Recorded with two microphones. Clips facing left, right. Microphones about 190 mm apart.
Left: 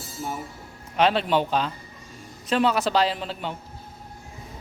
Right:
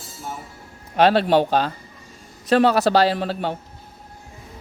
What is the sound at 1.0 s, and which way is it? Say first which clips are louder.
Speech: right 5 dB; 40° right (ahead or behind).